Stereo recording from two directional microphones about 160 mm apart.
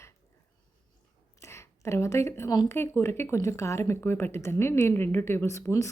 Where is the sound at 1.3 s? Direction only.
15° left (ahead or behind).